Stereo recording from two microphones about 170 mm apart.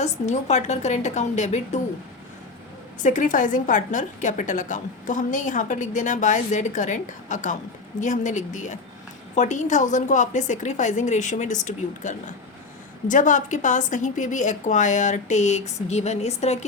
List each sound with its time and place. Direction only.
0.0 s a woman's voice: 45° left (ahead or behind)
3.0 s a woman's voice: 50° left (ahead or behind)